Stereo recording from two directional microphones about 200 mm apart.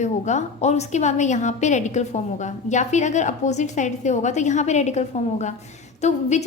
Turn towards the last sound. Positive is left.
turn(degrees=35)  # may be behind; listen again after turning